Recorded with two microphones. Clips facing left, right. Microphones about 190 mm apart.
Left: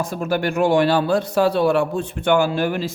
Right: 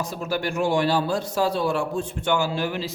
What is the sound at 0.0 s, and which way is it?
A man's voice, 55° left (ahead or behind).